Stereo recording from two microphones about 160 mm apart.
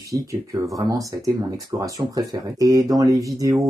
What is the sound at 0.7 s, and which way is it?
Speech, 20° right (ahead or behind).